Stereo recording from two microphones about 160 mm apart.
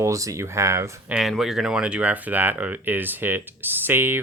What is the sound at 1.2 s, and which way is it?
Speech, centre (ahead or behind).